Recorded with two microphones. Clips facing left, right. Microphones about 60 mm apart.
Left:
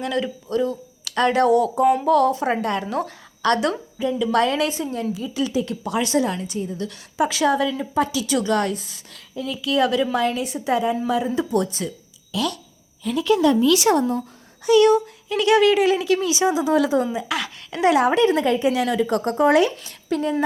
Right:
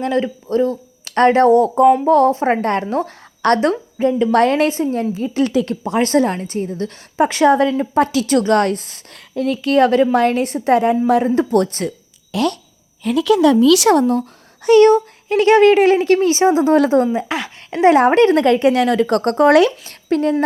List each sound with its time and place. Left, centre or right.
0.0 s a woman's voice: right
6.0 s a woman's voice: right
13.0 s speech: right
14.7 s a woman's voice: right
17.2 s a woman's voice: right
19.9 s speech: right